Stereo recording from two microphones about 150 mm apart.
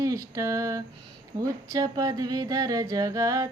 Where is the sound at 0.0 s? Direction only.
20° right (ahead or behind).